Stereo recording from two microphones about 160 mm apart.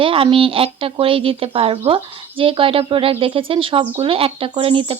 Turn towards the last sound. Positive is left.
turn(degrees=-35)  # may be behind; listen again after turning